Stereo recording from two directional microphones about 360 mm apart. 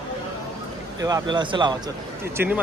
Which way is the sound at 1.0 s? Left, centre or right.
Centre.